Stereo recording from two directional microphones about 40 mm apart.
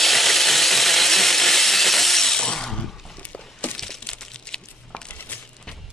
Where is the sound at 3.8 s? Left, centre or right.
Centre.